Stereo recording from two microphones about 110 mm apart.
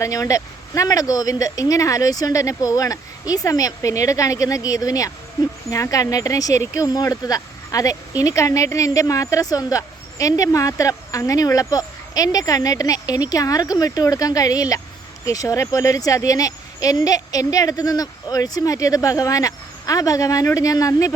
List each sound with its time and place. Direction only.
0.0 s speech: 30° left (ahead or behind)